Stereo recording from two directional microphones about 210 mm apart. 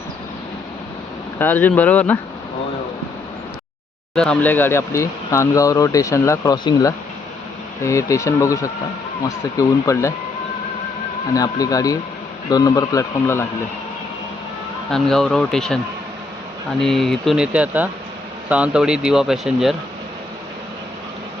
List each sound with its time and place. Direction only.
1.4 s speech: 10° left (ahead or behind)
4.1 s speech: 5° left (ahead or behind)
11.3 s speech: 15° left (ahead or behind)
14.8 s speech: centre (ahead or behind)
16.8 s speech: centre (ahead or behind)